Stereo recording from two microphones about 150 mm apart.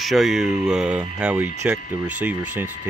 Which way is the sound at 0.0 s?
Centre (ahead or behind).